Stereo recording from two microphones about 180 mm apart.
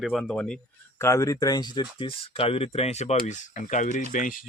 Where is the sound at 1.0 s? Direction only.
15° left (ahead or behind).